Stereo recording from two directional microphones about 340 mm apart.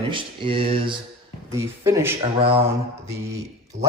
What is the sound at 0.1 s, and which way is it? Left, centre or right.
Speech, centre.